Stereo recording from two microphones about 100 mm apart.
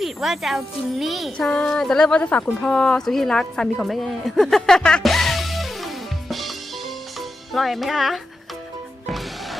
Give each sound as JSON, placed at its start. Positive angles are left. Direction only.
{"t": 0.0, "sound": "a woman's voice", "side_deg": 0}